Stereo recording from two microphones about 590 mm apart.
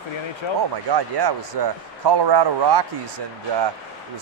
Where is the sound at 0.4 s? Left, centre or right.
Left.